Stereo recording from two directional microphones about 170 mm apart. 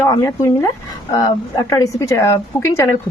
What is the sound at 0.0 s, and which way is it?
Speech, 20° left (ahead or behind).